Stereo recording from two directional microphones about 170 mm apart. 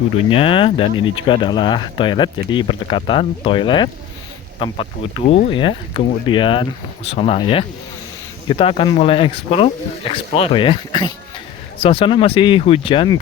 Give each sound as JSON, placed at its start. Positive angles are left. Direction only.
{"t": 0.3, "sound": "speech", "side_deg": 30}